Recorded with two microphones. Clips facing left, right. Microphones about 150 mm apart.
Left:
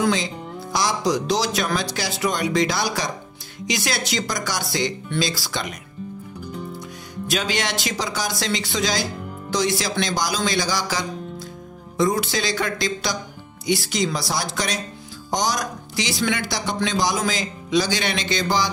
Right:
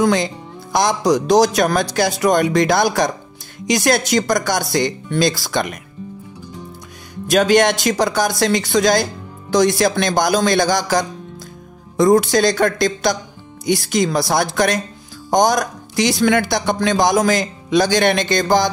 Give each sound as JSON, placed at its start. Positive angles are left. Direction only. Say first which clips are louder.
{"t": 0.0, "sound": "speech", "louder": "right 5 dB", "side_deg": -50}
{"t": 7.2, "sound": "speech", "louder": "right 12 dB", "side_deg": -50}